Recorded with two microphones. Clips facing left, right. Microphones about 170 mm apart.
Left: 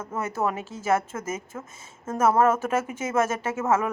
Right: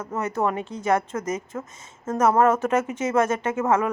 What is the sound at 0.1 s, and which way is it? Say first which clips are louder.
A woman's voice: right 3 dB; 10° left (ahead or behind).